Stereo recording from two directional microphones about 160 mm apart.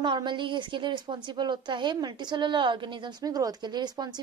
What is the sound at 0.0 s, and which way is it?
A woman's voice, 30° right (ahead or behind).